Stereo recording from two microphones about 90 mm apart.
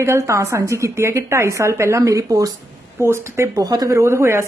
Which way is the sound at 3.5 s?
45° right (ahead or behind).